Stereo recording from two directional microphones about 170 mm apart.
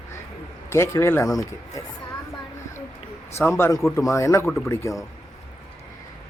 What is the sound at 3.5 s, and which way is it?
Speech, 15° left (ahead or behind).